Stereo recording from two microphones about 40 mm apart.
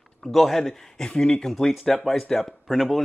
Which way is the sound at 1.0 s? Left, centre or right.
Centre.